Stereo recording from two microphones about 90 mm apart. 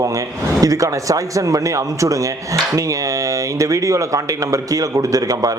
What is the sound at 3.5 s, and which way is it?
Speech, 35° right (ahead or behind).